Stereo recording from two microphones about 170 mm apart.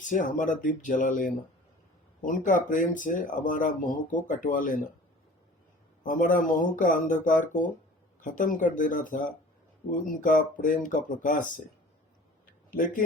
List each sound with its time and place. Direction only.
0.0 s speech: 50° left (ahead or behind)
6.0 s speech: 50° left (ahead or behind)
12.7 s speech: 55° left (ahead or behind)